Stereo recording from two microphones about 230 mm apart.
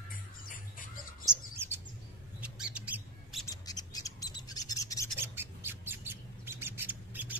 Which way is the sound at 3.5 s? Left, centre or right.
Centre.